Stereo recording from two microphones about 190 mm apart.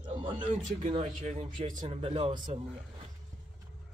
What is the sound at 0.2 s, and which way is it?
A man's voice, 30° right (ahead or behind).